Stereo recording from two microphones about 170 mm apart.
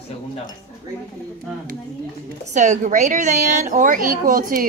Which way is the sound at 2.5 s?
45° right (ahead or behind).